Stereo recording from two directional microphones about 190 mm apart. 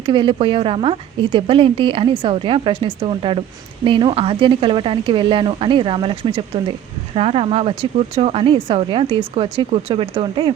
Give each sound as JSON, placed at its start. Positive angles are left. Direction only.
{"t": 0.0, "sound": "a woman's voice", "side_deg": -25}